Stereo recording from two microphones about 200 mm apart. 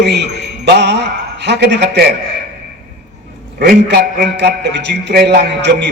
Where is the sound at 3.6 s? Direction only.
55° right (ahead or behind).